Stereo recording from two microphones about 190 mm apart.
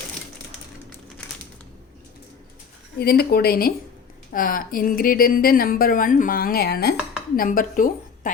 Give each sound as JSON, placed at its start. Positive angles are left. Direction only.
{"t": 3.0, "sound": "a woman's voice", "side_deg": 55}